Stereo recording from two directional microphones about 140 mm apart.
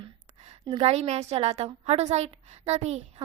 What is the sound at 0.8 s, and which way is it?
A woman's voice, 50° right (ahead or behind).